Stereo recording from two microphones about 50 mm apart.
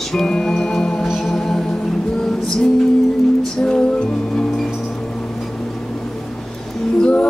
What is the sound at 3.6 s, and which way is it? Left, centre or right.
Music, centre.